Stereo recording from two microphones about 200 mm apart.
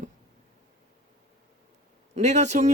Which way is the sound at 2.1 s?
35° right (ahead or behind).